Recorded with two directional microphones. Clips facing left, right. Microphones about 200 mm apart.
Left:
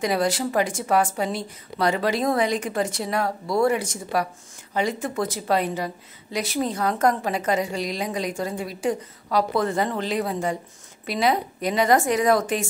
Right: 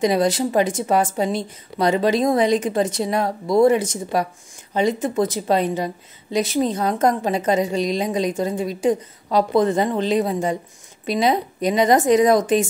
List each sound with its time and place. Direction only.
0.0 s speech: 20° right (ahead or behind)